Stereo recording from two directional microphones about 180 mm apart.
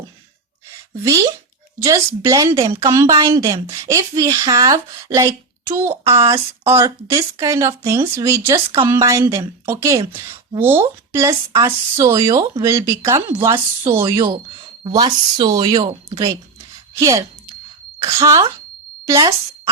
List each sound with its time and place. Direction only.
1.0 s a woman's voice: 15° right (ahead or behind); by 16.2 s 35° right (ahead or behind)
17.0 s a child's voice: 20° right (ahead or behind)